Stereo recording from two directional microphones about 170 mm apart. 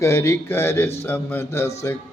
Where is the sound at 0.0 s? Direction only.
15° left (ahead or behind).